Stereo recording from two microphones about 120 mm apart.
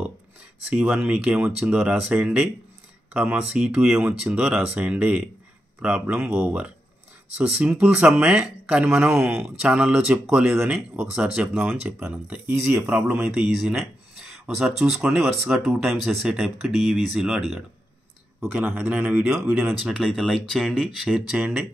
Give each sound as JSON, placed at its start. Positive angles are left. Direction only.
{"t": 0.7, "sound": "speech", "side_deg": -10}
{"t": 10.5, "sound": "speech", "side_deg": -15}
{"t": 11.0, "sound": "speech", "side_deg": -5}
{"t": 13.5, "sound": "speech", "side_deg": 0}
{"t": 21.4, "sound": "speech", "side_deg": -20}